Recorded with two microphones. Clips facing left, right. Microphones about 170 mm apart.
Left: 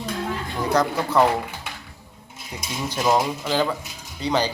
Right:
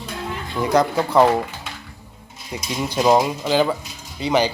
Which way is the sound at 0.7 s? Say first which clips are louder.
Right 3 dB; 10° right (ahead or behind).